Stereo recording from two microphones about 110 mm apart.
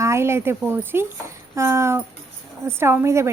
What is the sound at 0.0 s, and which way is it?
A woman's voice, 25° right (ahead or behind).